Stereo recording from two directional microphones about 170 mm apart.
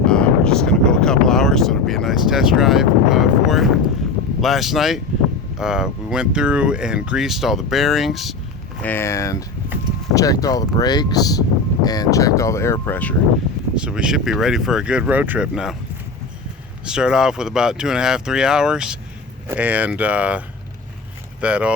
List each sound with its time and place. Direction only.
0.0 s wind noise: 5° left (ahead or behind)
4.4 s speech: centre (ahead or behind)
8.8 s speech: 10° left (ahead or behind)
13.7 s speech: 5° right (ahead or behind)
16.8 s speech: 5° right (ahead or behind)
21.4 s speech: 5° right (ahead or behind)